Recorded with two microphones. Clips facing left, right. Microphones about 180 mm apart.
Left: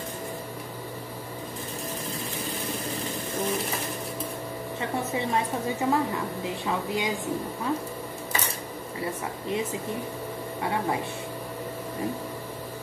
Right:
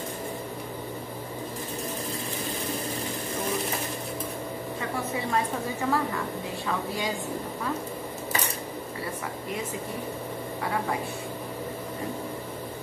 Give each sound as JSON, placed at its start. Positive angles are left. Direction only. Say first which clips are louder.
{"t": 5.3, "sound": "a woman's voice", "louder": "left 1 dB", "side_deg": 20}